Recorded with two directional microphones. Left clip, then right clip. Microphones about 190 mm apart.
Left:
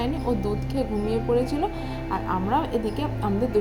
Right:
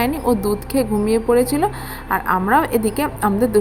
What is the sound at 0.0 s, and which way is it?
A woman's voice, 35° right (ahead or behind).